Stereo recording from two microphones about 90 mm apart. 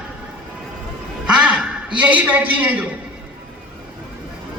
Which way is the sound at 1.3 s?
10° right (ahead or behind).